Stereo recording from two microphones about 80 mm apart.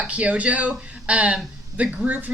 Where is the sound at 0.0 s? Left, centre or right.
Centre.